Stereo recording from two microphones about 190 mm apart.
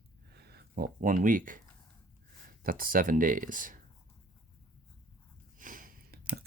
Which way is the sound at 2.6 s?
50° right (ahead or behind).